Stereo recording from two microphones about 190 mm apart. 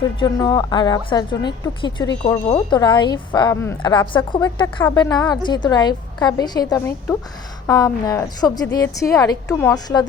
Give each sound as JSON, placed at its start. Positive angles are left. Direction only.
{"t": 0.2, "sound": "a woman's voice", "side_deg": 20}